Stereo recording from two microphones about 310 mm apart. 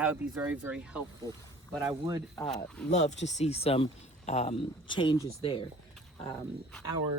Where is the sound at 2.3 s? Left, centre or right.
Centre.